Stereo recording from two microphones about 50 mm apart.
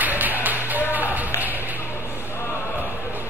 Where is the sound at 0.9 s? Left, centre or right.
Right.